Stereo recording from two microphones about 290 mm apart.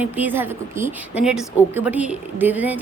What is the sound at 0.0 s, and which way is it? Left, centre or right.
A woman's voice, centre.